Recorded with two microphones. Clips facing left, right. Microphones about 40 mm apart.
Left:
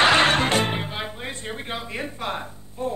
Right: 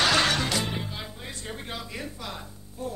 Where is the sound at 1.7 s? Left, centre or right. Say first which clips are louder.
Left 7 dB; left.